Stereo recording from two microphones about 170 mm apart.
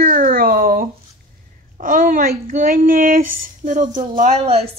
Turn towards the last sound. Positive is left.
turn(degrees=-40)  # may be behind; listen again after turning